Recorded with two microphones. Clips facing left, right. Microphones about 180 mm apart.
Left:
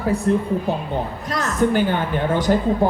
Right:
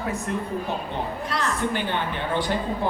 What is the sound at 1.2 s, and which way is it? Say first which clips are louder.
A woman's voice: left 8 dB; 45° left (ahead or behind).